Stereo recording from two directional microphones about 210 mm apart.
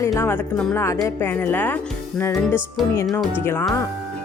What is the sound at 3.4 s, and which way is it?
Speech, 10° left (ahead or behind).